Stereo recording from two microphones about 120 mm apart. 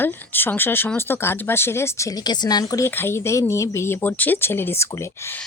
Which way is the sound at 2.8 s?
20° left (ahead or behind).